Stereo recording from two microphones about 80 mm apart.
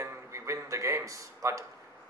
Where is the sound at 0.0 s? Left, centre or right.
Right.